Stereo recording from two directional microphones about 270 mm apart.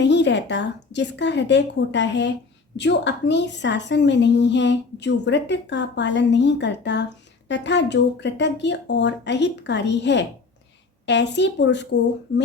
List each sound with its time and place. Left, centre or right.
0.0 s a woman's voice: left